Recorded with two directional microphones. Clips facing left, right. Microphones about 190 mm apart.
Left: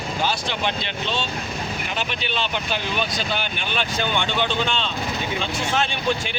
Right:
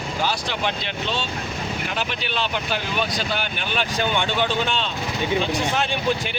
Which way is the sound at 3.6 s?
5° right (ahead or behind).